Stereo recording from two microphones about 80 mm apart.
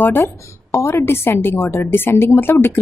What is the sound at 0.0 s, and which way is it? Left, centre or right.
A woman's voice, left.